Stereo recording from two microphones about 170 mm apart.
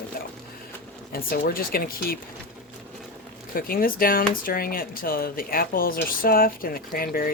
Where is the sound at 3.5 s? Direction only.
60° left (ahead or behind).